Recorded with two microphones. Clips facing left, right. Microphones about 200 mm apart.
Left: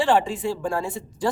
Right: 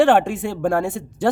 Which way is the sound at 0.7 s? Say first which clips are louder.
Right 6 dB; 70° right (ahead or behind).